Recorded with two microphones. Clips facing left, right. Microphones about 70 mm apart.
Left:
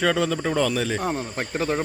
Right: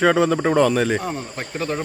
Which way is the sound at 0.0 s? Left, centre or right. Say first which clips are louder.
Right 5 dB; right.